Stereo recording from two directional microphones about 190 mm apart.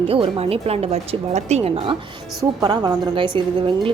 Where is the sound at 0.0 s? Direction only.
30° right (ahead or behind).